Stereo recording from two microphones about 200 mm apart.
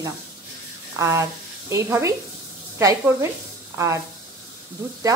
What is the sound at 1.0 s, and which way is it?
A woman's voice, 15° right (ahead or behind).